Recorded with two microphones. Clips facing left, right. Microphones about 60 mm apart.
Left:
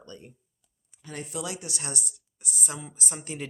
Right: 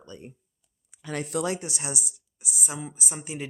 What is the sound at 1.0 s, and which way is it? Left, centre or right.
Speech, right.